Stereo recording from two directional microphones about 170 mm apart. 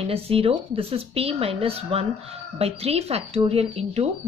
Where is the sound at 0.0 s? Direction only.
35° right (ahead or behind).